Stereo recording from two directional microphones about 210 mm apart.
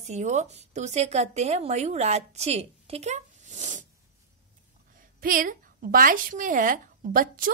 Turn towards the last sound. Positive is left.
turn(degrees=-40)  # may be behind; listen again after turning